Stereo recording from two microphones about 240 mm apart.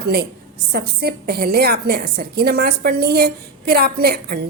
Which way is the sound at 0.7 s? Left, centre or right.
Right.